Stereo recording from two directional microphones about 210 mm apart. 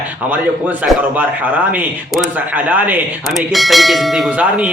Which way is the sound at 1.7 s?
5° right (ahead or behind).